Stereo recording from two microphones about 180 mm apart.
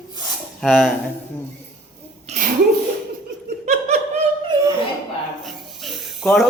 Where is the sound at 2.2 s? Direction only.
40° right (ahead or behind).